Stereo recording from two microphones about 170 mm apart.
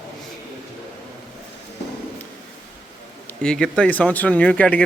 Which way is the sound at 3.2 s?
5° left (ahead or behind).